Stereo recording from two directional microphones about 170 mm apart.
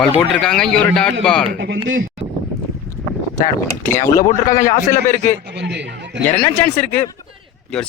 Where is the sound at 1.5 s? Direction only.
90° right.